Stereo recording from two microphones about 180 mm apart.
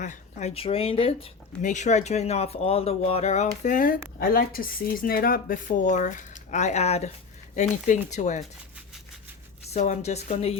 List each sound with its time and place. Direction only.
0.0 s speech: 45° left (ahead or behind)
9.7 s speech: 40° left (ahead or behind)